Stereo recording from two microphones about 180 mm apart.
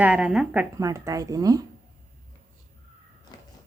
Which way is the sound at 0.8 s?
20° right (ahead or behind).